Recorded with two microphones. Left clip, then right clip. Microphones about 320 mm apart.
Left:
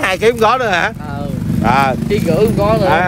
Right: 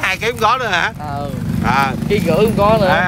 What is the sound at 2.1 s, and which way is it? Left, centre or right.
Speech, right.